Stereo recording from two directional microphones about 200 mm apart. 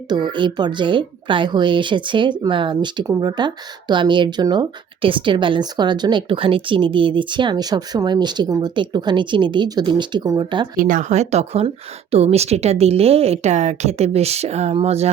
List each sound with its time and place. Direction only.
0.1 s a woman's voice: 20° right (ahead or behind)
10.8 s a woman's voice: 40° right (ahead or behind)